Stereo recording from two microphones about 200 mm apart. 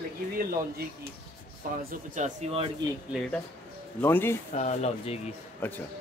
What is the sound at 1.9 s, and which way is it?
Speech, 40° right (ahead or behind).